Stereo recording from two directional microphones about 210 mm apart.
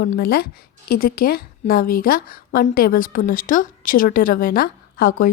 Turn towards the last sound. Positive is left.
turn(degrees=45)  # may be behind; listen again after turning